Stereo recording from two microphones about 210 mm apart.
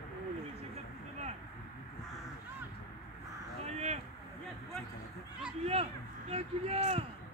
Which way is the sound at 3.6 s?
30° right (ahead or behind).